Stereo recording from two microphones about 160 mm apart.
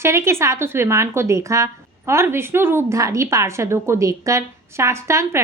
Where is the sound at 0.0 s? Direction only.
15° right (ahead or behind).